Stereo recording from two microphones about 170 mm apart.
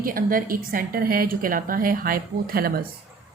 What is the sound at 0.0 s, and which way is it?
A woman's voice, 55° right (ahead or behind).